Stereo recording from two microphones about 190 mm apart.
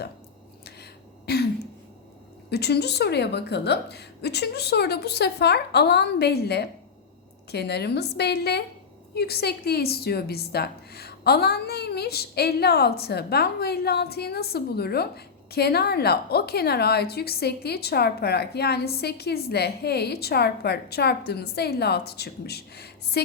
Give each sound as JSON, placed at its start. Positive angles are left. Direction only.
{"t": 1.3, "sound": "a woman's voice", "side_deg": 55}
{"t": 2.5, "sound": "a woman's voice", "side_deg": 60}